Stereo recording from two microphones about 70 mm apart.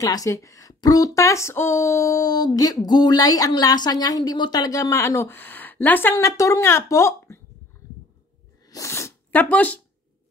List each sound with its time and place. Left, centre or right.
0.0 s a woman's voice: left
0.7 s a sound: left
6.1 s a woman's voice: left
8.6 s sneeze: left
9.3 s speech: left